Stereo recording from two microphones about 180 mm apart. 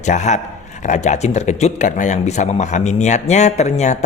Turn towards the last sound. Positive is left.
turn(degrees=40)  # may be behind; listen again after turning